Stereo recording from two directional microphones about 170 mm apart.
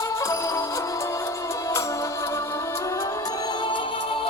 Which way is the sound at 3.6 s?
30° left (ahead or behind).